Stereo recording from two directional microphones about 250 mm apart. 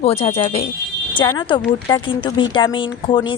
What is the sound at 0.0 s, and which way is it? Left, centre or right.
Speech, left.